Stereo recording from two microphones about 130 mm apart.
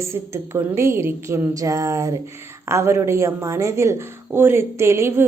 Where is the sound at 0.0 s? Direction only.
20° right (ahead or behind).